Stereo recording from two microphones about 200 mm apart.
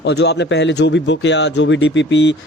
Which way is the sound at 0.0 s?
55° left (ahead or behind).